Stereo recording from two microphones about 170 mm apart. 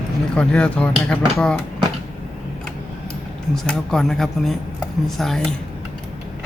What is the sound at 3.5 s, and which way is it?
Speech, 5° left (ahead or behind).